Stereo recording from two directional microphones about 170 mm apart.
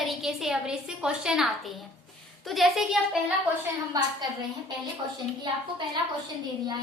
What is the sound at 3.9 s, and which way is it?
Speech, 20° right (ahead or behind).